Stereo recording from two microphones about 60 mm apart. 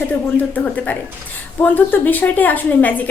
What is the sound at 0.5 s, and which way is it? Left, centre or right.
Speech, left.